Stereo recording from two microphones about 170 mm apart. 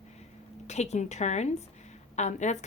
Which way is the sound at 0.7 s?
40° left (ahead or behind).